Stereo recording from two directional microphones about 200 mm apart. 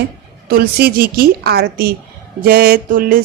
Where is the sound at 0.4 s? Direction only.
50° right (ahead or behind).